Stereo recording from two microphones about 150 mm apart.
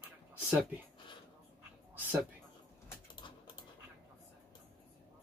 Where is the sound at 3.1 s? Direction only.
30° left (ahead or behind).